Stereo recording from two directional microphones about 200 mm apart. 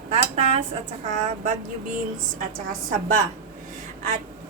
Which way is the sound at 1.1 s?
40° right (ahead or behind).